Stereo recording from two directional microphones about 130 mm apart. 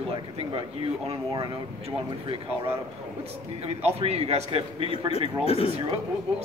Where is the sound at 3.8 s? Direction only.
50° right (ahead or behind).